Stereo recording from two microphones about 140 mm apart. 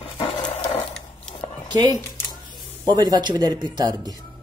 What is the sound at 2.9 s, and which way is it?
Speech, 30° right (ahead or behind).